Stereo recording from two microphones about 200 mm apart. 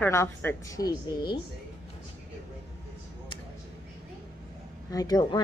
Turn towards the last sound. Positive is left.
turn(degrees=20)  # may be behind; listen again after turning